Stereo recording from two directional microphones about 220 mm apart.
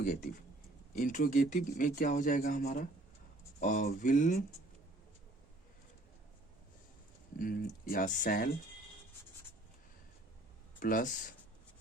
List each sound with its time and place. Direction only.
0.0 s speech: 35° left (ahead or behind)
7.3 s speech: 40° left (ahead or behind)
10.8 s speech: 40° left (ahead or behind)